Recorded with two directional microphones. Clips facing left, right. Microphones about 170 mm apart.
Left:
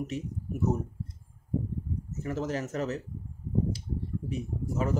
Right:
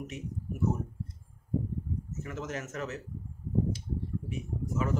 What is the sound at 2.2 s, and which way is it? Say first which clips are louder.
Speech: left 8 dB; 35° left (ahead or behind).